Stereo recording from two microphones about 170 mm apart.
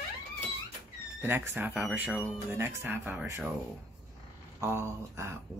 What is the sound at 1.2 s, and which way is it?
Speech, 10° right (ahead or behind).